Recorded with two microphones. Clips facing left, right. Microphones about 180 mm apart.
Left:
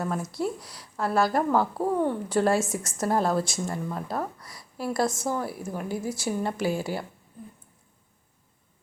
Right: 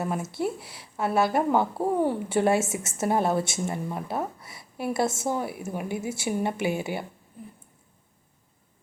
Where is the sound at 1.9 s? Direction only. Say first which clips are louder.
Right 1 dB; 10° right (ahead or behind).